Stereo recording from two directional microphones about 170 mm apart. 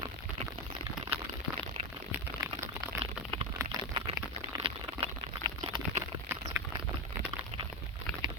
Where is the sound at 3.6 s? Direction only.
15° right (ahead or behind).